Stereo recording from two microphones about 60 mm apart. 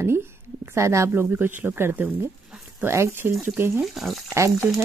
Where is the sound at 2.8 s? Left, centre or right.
Right.